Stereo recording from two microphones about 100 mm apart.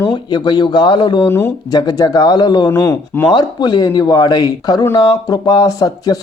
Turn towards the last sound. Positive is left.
turn(degrees=40)  # may be behind; listen again after turning